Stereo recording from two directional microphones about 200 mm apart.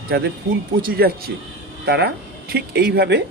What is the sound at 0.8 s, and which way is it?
Speech, 50° right (ahead or behind).